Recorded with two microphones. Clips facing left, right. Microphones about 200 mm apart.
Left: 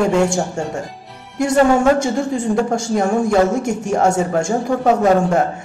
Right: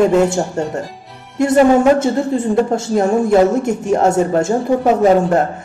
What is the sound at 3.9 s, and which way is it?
Speech, 20° right (ahead or behind).